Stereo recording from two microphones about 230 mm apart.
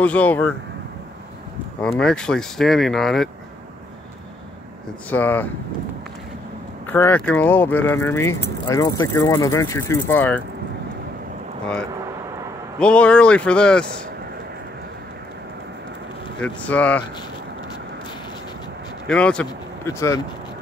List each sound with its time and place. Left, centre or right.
0.0 s speech: centre
1.8 s speech: centre
5.1 s speech: centre
6.9 s speech: centre
11.6 s speech: centre
16.3 s speech: centre
19.0 s speech: centre